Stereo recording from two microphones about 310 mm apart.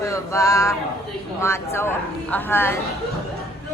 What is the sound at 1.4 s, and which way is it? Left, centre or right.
A child's voice, centre.